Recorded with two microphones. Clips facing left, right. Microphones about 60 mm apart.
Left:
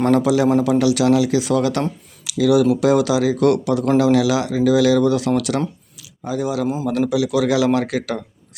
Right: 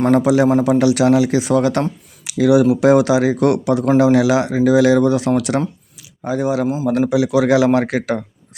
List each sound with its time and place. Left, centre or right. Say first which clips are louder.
0.1 s speech: right 2 dB; right